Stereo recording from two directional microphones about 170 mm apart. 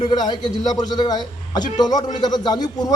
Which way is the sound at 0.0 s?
25° left (ahead or behind).